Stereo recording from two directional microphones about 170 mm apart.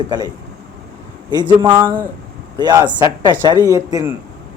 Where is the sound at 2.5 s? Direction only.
25° right (ahead or behind).